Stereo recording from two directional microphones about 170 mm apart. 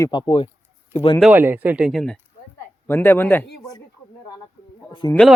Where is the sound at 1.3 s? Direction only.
10° right (ahead or behind).